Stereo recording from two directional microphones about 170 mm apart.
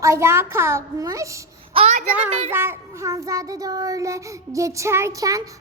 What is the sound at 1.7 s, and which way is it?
Speech, 35° right (ahead or behind).